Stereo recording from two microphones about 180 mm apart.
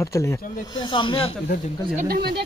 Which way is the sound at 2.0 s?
60° right (ahead or behind).